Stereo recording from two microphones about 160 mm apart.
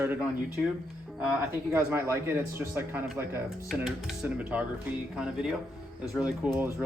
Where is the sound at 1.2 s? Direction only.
15° right (ahead or behind).